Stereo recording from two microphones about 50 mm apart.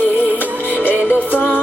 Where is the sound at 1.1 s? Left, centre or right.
Left.